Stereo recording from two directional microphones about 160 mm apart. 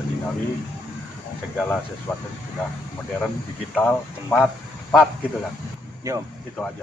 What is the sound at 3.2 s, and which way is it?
Speech, 5° left (ahead or behind).